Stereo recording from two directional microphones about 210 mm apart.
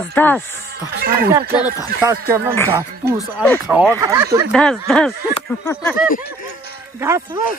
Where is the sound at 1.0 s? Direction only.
45° right (ahead or behind).